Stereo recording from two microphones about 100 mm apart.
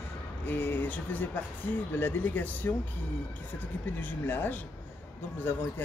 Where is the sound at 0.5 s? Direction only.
20° left (ahead or behind).